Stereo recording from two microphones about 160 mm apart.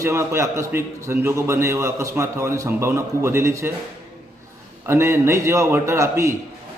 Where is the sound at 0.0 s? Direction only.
15° right (ahead or behind).